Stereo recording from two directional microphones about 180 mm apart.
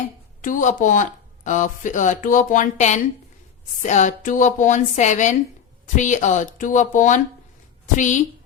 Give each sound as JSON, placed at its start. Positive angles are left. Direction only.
{"t": 0.4, "sound": "speech", "side_deg": 45}